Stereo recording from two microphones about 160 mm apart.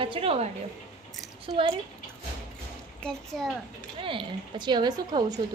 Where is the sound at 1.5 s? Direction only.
40° right (ahead or behind).